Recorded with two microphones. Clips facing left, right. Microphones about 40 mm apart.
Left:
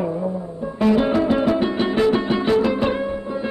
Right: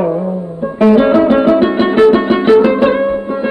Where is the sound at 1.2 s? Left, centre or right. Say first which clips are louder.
Right 9 dB; right.